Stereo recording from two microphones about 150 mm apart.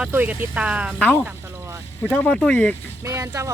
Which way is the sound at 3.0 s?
20° right (ahead or behind).